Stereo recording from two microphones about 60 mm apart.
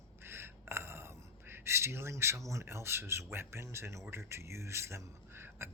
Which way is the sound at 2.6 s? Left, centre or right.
Right.